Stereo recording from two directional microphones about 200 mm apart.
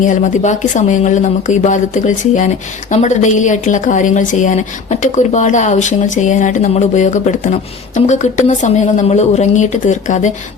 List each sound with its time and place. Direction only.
0.0 s speech: 40° left (ahead or behind)